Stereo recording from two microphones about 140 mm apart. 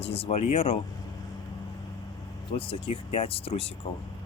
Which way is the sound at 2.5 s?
40° left (ahead or behind).